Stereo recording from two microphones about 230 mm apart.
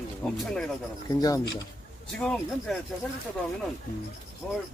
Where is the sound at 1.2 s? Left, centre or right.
Centre.